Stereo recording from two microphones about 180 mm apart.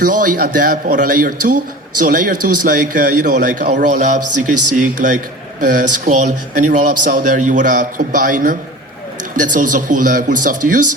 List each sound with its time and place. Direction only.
0.0 s a man's voice: 45° right (ahead or behind)